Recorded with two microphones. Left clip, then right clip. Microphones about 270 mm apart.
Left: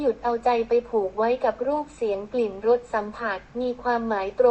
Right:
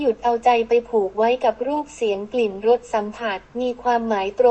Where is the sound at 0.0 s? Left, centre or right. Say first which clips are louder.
Right 5 dB; right.